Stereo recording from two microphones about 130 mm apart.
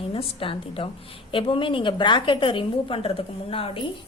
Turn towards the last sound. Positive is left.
turn(degrees=45)  # may be behind; listen again after turning